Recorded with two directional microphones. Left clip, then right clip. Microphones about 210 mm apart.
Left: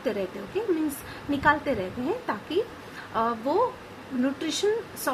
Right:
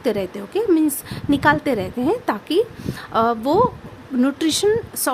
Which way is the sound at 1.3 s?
55° right (ahead or behind).